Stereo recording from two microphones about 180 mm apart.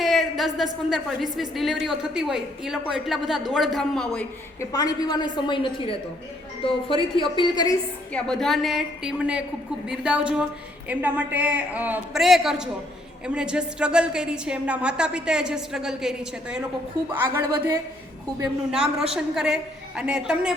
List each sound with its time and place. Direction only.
0.0 s a woman's voice: centre (ahead or behind)
4.7 s a woman's voice: 20° left (ahead or behind)
8.1 s a woman's voice: 5° left (ahead or behind)